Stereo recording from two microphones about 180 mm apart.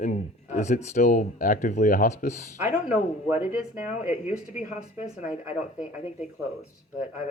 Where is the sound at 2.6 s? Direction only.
10° right (ahead or behind).